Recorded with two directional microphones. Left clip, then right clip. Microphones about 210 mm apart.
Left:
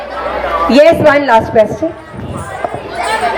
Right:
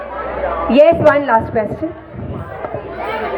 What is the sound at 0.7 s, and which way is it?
Speech, 55° left (ahead or behind).